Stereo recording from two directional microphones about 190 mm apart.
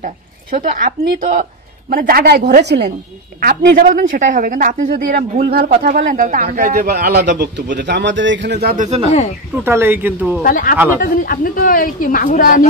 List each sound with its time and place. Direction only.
0.5 s a man's voice: 45° right (ahead or behind); by 2.9 s 65° right (ahead or behind)
3.3 s a man's voice: 50° right (ahead or behind)
8.7 s speech: 35° right (ahead or behind)
9.6 s speech: 15° right (ahead or behind)
10.4 s speech: 45° left (ahead or behind)